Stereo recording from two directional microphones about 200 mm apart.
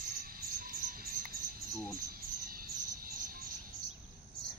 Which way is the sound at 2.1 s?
50° right (ahead or behind).